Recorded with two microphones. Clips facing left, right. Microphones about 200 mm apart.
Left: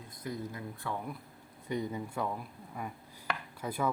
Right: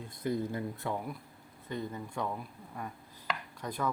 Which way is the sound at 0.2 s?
30° right (ahead or behind).